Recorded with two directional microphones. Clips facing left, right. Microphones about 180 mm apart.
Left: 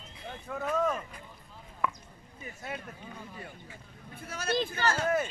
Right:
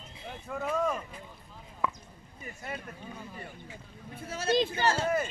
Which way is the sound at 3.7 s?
25° right (ahead or behind).